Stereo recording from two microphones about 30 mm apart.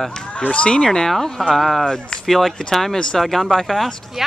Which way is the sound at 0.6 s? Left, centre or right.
Left.